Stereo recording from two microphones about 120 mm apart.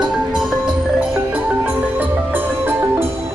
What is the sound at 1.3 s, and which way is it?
Music, 15° right (ahead or behind).